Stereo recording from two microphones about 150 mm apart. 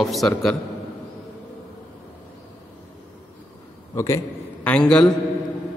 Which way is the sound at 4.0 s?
20° left (ahead or behind).